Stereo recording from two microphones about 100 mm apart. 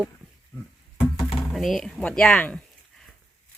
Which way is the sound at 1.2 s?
5° left (ahead or behind).